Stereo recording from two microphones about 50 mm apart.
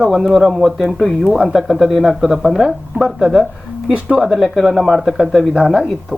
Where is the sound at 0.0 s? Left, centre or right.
Centre.